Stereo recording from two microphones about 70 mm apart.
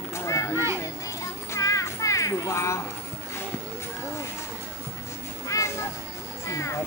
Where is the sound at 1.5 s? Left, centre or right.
Left.